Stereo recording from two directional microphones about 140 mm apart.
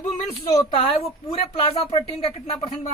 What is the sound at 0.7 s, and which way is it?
Speech, 40° left (ahead or behind).